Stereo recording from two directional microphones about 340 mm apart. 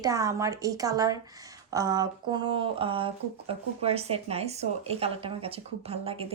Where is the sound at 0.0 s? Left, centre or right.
Centre.